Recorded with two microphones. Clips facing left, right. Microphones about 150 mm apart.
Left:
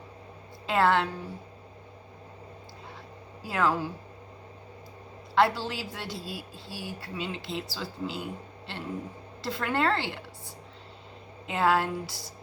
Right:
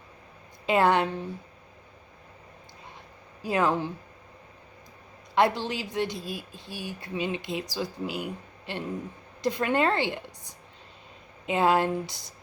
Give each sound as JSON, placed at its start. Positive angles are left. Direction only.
{"t": 0.7, "sound": "speech", "side_deg": -20}
{"t": 3.4, "sound": "speech", "side_deg": -20}
{"t": 5.3, "sound": "a woman's voice", "side_deg": -20}